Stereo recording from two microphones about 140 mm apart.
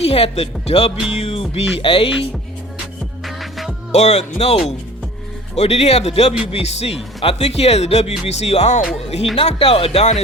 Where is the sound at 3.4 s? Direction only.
Centre (ahead or behind).